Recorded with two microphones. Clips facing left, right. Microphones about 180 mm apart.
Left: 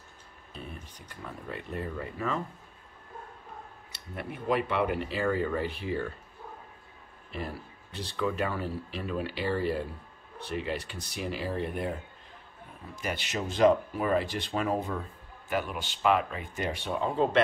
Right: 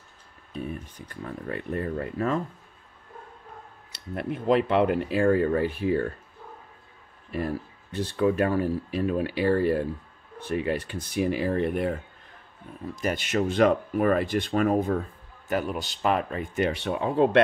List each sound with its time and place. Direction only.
0.9 s speech: 55° right (ahead or behind)
4.1 s speech: 60° right (ahead or behind)
7.9 s speech: 50° right (ahead or behind)
12.9 s speech: 45° right (ahead or behind)
16.5 s speech: 65° right (ahead or behind)